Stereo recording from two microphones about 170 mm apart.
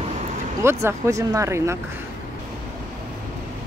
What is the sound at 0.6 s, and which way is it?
Speech, 15° right (ahead or behind).